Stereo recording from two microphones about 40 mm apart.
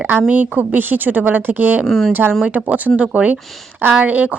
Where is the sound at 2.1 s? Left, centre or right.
Right.